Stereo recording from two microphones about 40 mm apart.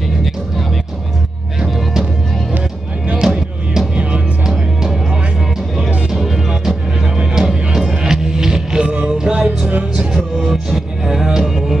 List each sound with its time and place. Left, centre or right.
3.1 s music: centre
3.9 s music: right
6.1 s music: centre; by 9.7 s right
10.4 s music: centre